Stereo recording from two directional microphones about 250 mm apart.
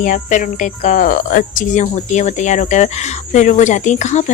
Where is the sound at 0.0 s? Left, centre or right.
Left.